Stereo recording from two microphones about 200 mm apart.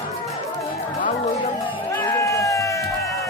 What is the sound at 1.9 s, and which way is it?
Run, 10° left (ahead or behind).